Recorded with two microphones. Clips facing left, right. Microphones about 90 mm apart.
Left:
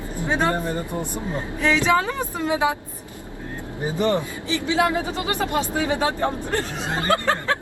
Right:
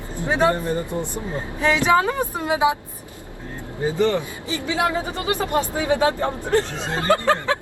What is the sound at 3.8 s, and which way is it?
Speech, 20° left (ahead or behind).